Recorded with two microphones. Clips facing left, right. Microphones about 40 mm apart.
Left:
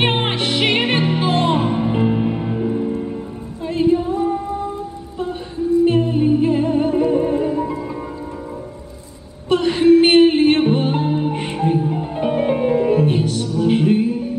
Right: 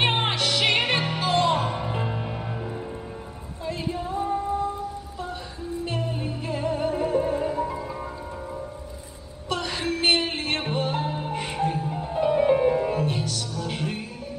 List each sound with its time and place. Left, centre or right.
0.0 s music: left; by 2.9 s centre
3.6 s female singing: left
5.9 s music: left
9.5 s music: left